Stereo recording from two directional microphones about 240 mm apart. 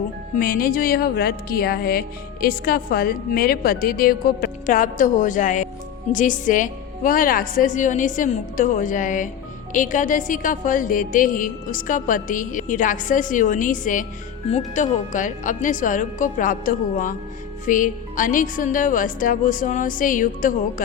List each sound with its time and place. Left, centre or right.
0.3 s a woman's voice: left